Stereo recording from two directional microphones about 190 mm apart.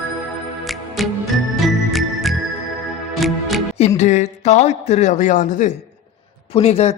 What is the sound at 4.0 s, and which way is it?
A man's voice, 35° left (ahead or behind).